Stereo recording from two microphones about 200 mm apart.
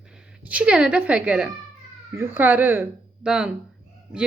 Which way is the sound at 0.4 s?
5° right (ahead or behind).